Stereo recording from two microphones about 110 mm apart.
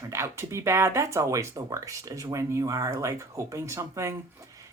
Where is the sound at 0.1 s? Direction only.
25° right (ahead or behind).